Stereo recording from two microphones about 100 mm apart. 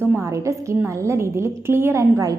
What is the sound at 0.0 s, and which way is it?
A woman's voice, 30° right (ahead or behind).